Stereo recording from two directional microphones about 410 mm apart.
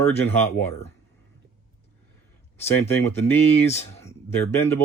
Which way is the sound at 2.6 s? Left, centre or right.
Centre.